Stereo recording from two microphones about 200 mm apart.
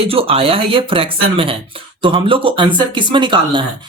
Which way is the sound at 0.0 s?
30° right (ahead or behind).